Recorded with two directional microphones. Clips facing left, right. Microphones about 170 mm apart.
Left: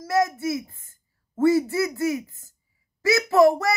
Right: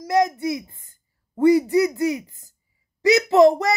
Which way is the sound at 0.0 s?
15° right (ahead or behind).